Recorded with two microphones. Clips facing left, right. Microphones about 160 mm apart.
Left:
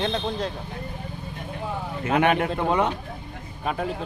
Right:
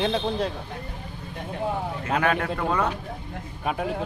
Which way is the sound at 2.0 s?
20° left (ahead or behind).